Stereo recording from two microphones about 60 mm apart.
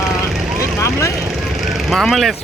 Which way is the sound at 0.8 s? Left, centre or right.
Left.